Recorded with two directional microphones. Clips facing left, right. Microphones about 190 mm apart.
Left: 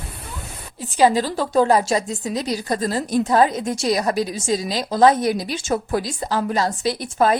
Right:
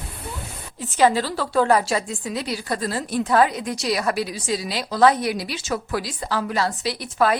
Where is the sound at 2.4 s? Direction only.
40° left (ahead or behind).